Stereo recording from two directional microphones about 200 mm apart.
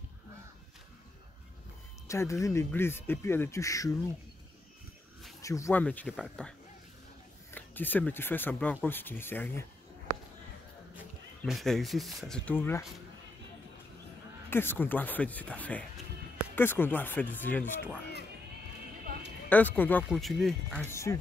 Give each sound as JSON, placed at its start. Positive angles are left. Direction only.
{"t": 2.0, "sound": "speech", "side_deg": 15}
{"t": 5.4, "sound": "speech", "side_deg": 15}
{"t": 7.5, "sound": "speech", "side_deg": 10}
{"t": 11.4, "sound": "speech", "side_deg": 0}
{"t": 14.5, "sound": "speech", "side_deg": 10}
{"t": 19.5, "sound": "speech", "side_deg": 10}
{"t": 20.8, "sound": "speech", "side_deg": 15}